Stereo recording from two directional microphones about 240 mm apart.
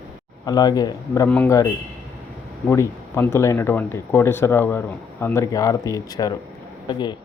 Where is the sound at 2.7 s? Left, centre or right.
Centre.